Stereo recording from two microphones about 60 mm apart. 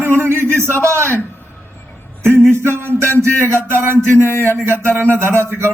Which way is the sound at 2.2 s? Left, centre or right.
Right.